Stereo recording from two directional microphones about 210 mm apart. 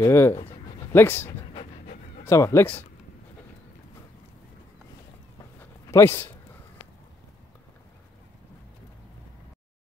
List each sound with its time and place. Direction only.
0.0 s speech: 10° left (ahead or behind)
0.4 s a sound: 25° left (ahead or behind)
0.9 s speech: 10° left (ahead or behind)
5.9 s speech: 10° left (ahead or behind)